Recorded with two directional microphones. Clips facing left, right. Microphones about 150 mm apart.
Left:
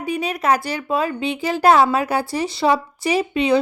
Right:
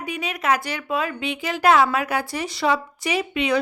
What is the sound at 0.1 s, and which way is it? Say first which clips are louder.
Speech: left 4 dB; 35° left (ahead or behind).